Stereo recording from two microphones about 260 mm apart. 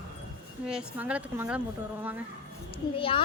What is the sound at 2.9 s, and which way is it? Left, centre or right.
Speech, centre.